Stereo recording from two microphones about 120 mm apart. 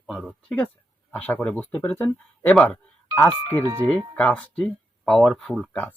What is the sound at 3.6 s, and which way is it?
Speech, 30° right (ahead or behind).